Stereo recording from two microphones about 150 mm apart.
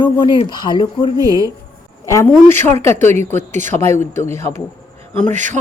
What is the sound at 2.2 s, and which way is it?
A man's voice, 15° left (ahead or behind).